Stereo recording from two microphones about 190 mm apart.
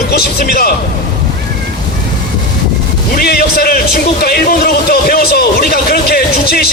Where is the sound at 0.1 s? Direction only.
55° left (ahead or behind).